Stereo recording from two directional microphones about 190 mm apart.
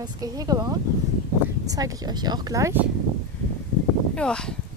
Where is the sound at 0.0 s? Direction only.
20° right (ahead or behind).